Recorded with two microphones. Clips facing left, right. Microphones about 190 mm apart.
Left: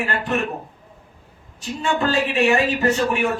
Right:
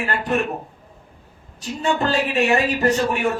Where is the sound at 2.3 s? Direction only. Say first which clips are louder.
Left 1 dB; 40° right (ahead or behind).